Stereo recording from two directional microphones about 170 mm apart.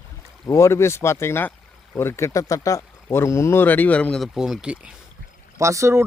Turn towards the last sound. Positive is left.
turn(degrees=-15)  # may be behind; listen again after turning